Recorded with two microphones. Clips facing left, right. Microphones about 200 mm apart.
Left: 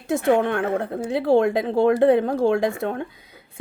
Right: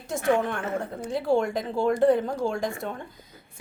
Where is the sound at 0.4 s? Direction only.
65° left (ahead or behind).